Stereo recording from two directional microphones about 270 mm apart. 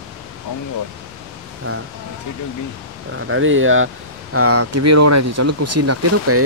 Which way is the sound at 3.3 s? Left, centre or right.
Right.